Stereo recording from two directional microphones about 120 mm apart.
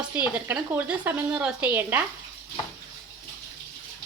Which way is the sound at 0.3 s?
15° right (ahead or behind).